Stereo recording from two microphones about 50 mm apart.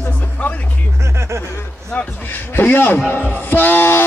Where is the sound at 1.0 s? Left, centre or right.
Right.